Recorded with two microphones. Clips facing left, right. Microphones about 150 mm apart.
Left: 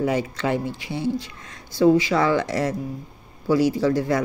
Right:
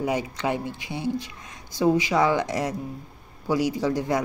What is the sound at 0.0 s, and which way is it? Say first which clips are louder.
Speech: left 3 dB; 15° right (ahead or behind).